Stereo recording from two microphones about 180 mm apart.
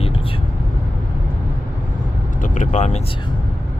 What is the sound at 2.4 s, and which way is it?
Speech, 40° left (ahead or behind).